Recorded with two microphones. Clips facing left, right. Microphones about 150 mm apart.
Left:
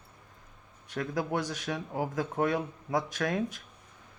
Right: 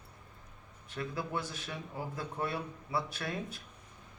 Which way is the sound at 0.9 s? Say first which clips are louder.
Left 6 dB; 90° left.